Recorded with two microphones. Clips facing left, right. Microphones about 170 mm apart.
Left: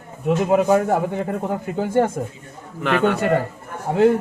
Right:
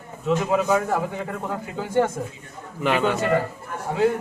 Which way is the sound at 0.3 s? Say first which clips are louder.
Left 4 dB; 50° left (ahead or behind).